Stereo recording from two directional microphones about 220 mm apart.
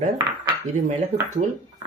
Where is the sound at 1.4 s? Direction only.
35° right (ahead or behind).